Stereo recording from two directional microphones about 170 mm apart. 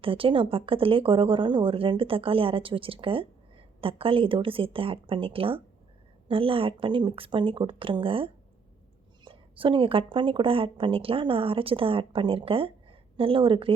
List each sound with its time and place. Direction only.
0.0 s speech: 30° right (ahead or behind)